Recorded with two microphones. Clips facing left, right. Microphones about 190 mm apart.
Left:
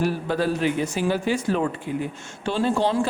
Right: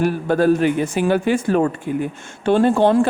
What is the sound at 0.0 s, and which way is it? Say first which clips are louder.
Speech: right 6 dB; 50° right (ahead or behind).